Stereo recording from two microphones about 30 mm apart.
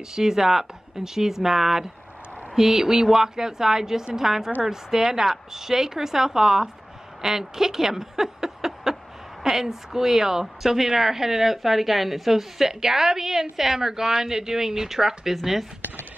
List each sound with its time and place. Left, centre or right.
0.1 s speech: centre